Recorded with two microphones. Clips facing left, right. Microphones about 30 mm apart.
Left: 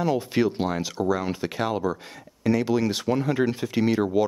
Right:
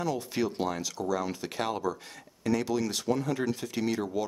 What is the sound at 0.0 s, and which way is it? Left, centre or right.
Speech, left.